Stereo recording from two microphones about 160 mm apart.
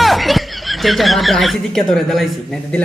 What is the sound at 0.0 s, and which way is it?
A man's voice, centre (ahead or behind).